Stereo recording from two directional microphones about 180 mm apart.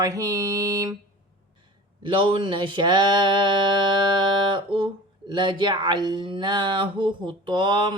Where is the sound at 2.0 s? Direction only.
30° right (ahead or behind).